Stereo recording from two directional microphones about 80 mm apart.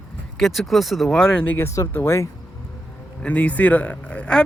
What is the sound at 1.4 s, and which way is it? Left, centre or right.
Speech, left.